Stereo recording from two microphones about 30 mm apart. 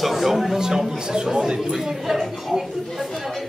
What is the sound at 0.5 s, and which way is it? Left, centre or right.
Speech, right.